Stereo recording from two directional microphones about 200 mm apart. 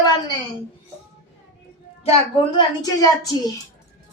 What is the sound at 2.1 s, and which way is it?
Speech, 30° left (ahead or behind).